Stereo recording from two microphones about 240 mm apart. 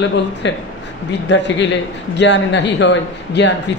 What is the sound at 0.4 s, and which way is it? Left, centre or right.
A man's voice, left.